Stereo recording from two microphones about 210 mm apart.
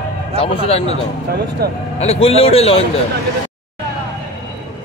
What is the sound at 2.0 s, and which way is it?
Speech, 30° left (ahead or behind).